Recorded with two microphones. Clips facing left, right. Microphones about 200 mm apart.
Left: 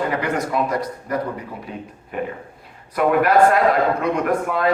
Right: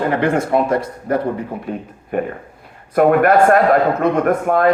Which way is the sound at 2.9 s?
50° right (ahead or behind).